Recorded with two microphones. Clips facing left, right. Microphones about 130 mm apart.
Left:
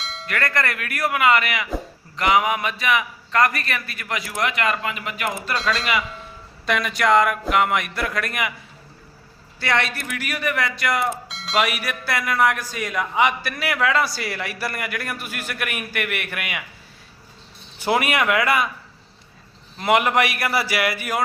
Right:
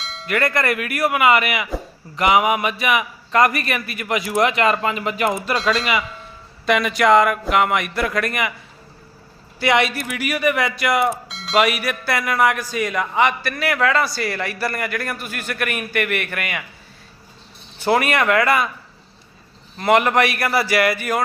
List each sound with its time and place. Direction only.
0.0 s music: centre (ahead or behind)
0.3 s a man's voice: 10° right (ahead or behind); by 5.5 s 25° right (ahead or behind)
5.5 s speech: centre (ahead or behind)
9.6 s speech: 10° right (ahead or behind); by 16.6 s 5° left (ahead or behind)
17.7 s a man's voice: 10° left (ahead or behind)
19.8 s a man's voice: 5° left (ahead or behind)